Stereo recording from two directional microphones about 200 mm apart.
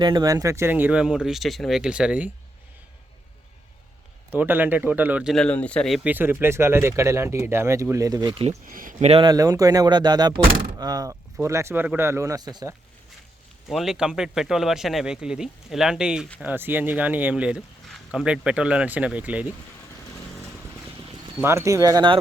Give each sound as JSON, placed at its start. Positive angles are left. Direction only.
{"t": 0.0, "sound": "speech", "side_deg": -20}
{"t": 4.3, "sound": "speech", "side_deg": -10}
{"t": 8.4, "sound": "speech", "side_deg": -45}
{"t": 13.7, "sound": "speech", "side_deg": 0}
{"t": 21.4, "sound": "speech", "side_deg": -15}